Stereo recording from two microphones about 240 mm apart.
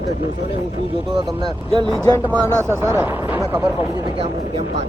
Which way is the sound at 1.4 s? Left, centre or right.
Right.